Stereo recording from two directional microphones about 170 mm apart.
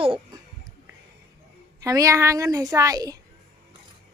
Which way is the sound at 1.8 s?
20° right (ahead or behind).